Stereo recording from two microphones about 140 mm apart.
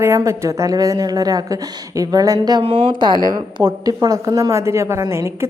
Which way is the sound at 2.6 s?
40° right (ahead or behind).